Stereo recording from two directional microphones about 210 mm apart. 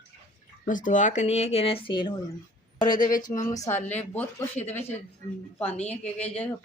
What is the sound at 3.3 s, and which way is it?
Speech, 15° left (ahead or behind).